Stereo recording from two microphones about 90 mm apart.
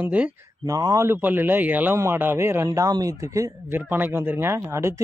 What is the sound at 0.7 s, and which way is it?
Speech, 45° right (ahead or behind).